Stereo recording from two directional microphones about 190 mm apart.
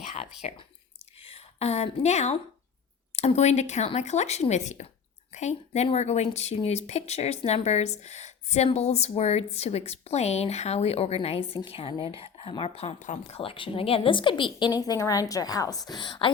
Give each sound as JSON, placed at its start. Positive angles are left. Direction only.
{"t": 0.4, "sound": "a woman's voice", "side_deg": 35}